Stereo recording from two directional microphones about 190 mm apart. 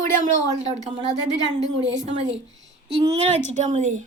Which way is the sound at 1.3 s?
70° right (ahead or behind).